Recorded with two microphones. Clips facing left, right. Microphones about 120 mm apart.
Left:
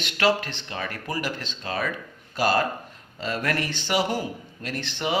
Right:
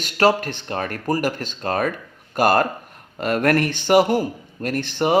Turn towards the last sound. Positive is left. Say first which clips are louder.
# right 8 dB
turn(degrees=-45)  # may be behind; listen again after turning